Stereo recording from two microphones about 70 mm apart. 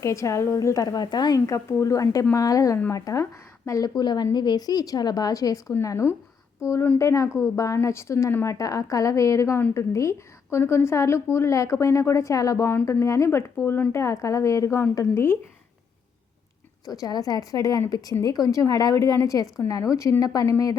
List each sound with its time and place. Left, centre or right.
0.0 s a woman's voice: left
0.7 s a woman's voice: left
1.5 s a woman's voice: left
8.4 s a woman's voice: left
12.8 s a woman's voice: left
15.1 s speech: left
17.0 s a woman's voice: left